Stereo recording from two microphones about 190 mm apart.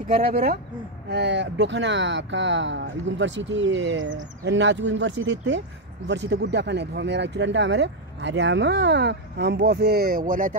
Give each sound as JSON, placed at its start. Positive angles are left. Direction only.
{"t": 1.1, "sound": "speech", "side_deg": -65}